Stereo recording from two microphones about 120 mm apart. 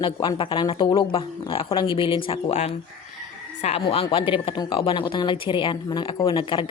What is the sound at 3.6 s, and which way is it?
Speech, 60° left (ahead or behind).